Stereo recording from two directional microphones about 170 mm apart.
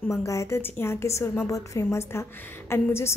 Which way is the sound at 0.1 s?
15° left (ahead or behind).